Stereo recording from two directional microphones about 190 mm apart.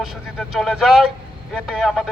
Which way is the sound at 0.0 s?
Centre (ahead or behind).